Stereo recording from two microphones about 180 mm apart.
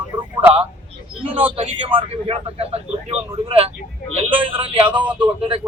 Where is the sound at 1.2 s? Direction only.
30° right (ahead or behind).